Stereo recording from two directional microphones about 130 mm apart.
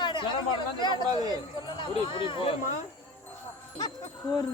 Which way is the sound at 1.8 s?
40° left (ahead or behind).